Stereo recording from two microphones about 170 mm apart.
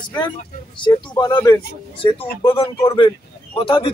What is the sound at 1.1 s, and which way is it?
A man's voice, 20° left (ahead or behind).